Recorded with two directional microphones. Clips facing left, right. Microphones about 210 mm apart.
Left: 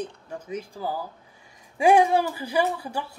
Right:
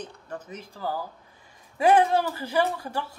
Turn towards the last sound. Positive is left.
turn(degrees=15)  # may be behind; listen again after turning